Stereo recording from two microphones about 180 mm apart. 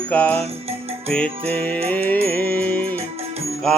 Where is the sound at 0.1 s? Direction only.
10° left (ahead or behind).